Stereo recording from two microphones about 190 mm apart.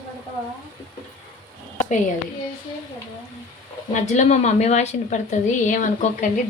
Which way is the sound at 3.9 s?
40° left (ahead or behind).